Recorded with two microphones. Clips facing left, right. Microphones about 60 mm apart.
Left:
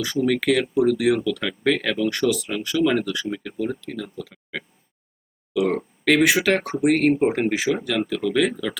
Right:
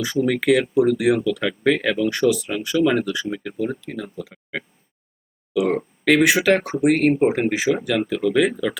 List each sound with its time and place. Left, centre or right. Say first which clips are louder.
0.0 s speech: right 1 dB; centre